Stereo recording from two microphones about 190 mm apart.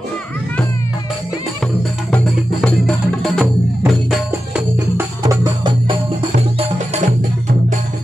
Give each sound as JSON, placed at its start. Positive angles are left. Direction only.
{"t": 2.0, "sound": "music", "side_deg": 5}
{"t": 4.9, "sound": "music", "side_deg": -20}